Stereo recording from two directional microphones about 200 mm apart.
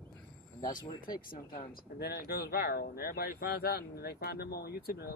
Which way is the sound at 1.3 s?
50° left (ahead or behind).